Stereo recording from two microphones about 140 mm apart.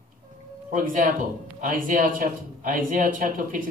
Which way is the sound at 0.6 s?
70° right (ahead or behind).